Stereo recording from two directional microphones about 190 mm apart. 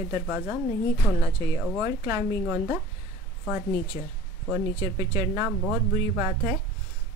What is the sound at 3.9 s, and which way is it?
Speech, 15° right (ahead or behind).